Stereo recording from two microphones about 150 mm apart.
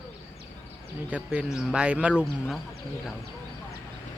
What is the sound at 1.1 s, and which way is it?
Speech, 10° right (ahead or behind).